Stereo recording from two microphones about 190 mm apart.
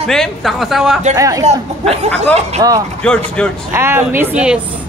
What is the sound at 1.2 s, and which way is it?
Speech, 15° right (ahead or behind).